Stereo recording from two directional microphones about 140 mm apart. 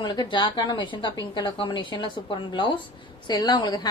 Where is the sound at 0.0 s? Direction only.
35° left (ahead or behind).